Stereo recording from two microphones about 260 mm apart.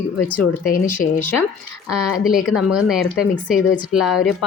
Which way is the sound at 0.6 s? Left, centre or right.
Left.